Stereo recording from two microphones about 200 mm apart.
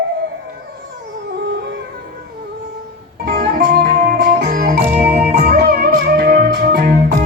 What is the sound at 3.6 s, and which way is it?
Music, 55° right (ahead or behind).